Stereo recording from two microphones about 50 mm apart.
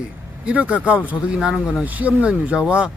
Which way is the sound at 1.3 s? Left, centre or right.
Centre.